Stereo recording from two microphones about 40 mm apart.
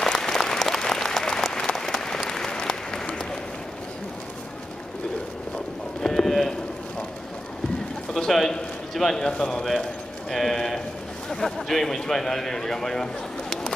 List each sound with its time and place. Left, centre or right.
0.0 s applause: centre
6.0 s livestock: centre
8.3 s a sound: centre
9.2 s speech: left
10.3 s a sound: centre
11.2 s a man's voice: centre